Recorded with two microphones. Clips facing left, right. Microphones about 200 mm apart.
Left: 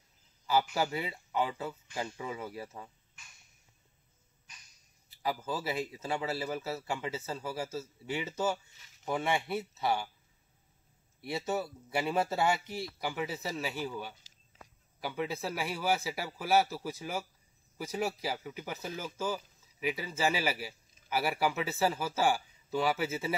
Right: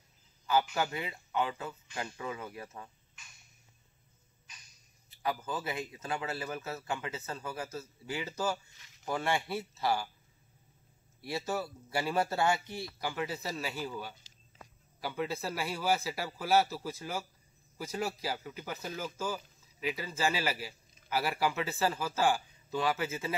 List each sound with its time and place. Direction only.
0.5 s a man's voice: 30° left (ahead or behind)
5.5 s a man's voice: 30° left (ahead or behind)
8.7 s speech: 5° left (ahead or behind)
9.2 s a man's voice: 20° left (ahead or behind)
11.2 s a man's voice: 20° left (ahead or behind)
12.2 s speech: centre (ahead or behind)